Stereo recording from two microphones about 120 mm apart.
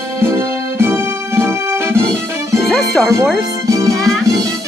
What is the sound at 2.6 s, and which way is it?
Music, centre (ahead or behind).